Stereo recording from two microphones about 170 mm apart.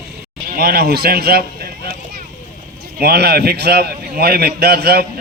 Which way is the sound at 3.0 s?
70° right (ahead or behind).